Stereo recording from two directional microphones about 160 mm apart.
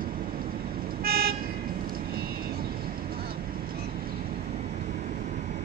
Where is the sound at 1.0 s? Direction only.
70° right (ahead or behind).